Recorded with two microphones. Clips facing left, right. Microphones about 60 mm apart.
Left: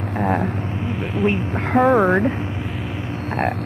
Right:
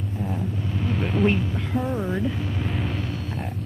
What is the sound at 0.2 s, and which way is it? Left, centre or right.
Vehicle, left.